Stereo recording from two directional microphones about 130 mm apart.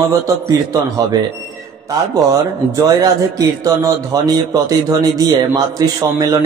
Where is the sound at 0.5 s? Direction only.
25° right (ahead or behind).